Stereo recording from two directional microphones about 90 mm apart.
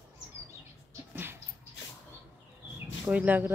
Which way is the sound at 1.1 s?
25° right (ahead or behind).